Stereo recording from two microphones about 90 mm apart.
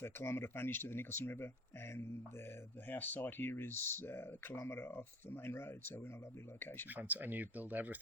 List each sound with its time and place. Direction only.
0.0 s speech: 25° left (ahead or behind)
2.9 s speech: 20° left (ahead or behind)
6.9 s speech: 20° right (ahead or behind)